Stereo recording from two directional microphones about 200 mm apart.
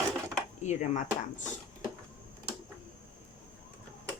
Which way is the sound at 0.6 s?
35° left (ahead or behind).